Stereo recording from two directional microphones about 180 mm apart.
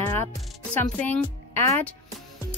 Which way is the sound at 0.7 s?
10° left (ahead or behind).